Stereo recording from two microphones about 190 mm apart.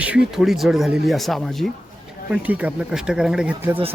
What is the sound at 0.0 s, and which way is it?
Speech, 5° right (ahead or behind).